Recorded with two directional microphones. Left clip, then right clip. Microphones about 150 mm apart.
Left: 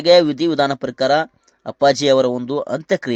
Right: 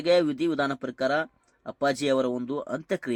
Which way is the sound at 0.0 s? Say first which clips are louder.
Left 10 dB; 25° left (ahead or behind).